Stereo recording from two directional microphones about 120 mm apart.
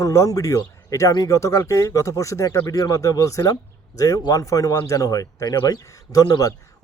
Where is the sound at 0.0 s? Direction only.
25° left (ahead or behind).